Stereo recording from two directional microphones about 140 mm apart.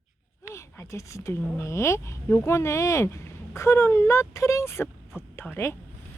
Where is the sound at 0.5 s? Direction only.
20° left (ahead or behind).